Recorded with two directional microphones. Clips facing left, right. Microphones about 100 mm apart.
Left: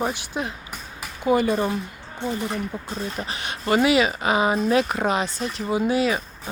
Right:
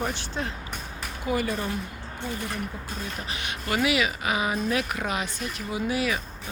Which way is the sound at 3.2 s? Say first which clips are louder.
Left 7 dB; 35° left (ahead or behind).